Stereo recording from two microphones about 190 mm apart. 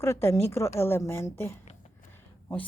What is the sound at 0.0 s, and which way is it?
A woman's voice, 15° left (ahead or behind).